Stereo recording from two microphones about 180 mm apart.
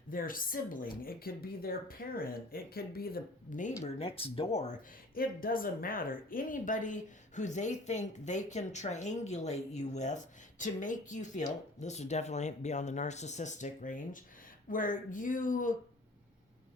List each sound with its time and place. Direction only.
0.1 s a woman's voice: 50° left (ahead or behind)
3.8 s speech: 35° left (ahead or behind)
5.1 s a woman's voice: 55° left (ahead or behind)